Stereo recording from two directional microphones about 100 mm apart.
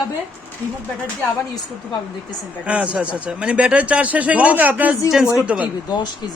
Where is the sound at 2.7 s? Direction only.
15° right (ahead or behind).